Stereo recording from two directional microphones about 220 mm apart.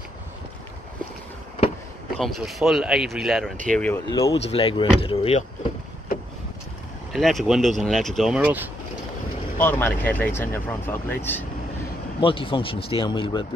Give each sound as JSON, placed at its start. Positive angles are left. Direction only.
{"t": 2.1, "sound": "speech", "side_deg": 0}
{"t": 4.1, "sound": "speech", "side_deg": 15}
{"t": 7.1, "sound": "speech", "side_deg": 0}
{"t": 9.6, "sound": "speech", "side_deg": 10}
{"t": 12.2, "sound": "speech", "side_deg": 25}